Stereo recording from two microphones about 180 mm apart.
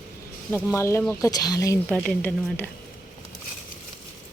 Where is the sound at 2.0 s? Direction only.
Centre (ahead or behind).